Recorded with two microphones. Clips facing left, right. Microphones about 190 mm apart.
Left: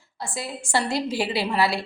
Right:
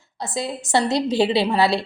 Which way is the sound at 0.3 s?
20° right (ahead or behind).